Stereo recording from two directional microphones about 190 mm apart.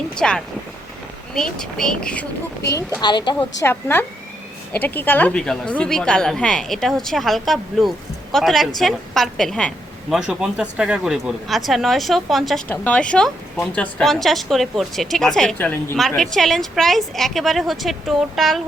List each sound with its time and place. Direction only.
0.2 s a woman's voice: 5° left (ahead or behind)
3.0 s a woman's voice: 25° left (ahead or behind)
3.6 s a woman's voice: 10° left (ahead or behind)